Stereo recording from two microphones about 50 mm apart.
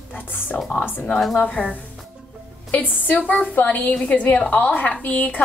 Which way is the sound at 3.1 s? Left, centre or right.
Left.